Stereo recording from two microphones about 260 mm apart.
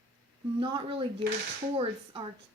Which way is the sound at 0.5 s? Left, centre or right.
Centre.